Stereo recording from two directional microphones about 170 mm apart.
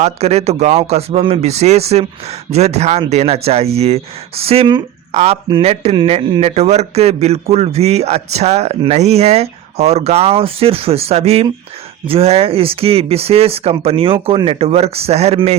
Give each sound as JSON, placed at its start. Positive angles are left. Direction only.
{"t": 0.0, "sound": "speech", "side_deg": -40}